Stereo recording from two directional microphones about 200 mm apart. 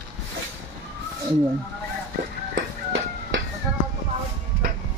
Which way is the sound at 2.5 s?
65° right (ahead or behind).